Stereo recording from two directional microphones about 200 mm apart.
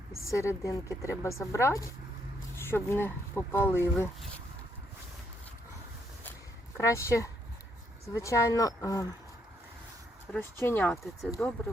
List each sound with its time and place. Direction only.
0.3 s speech: 15° left (ahead or behind)
6.7 s speech: 15° left (ahead or behind)
10.3 s speech: 10° left (ahead or behind)